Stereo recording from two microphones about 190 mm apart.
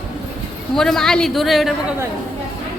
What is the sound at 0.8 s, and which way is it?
Speech, centre (ahead or behind).